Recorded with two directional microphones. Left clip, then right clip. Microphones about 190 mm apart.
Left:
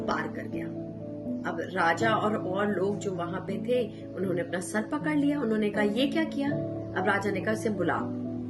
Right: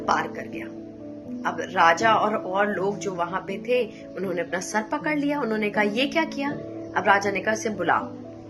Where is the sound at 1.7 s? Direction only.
40° right (ahead or behind).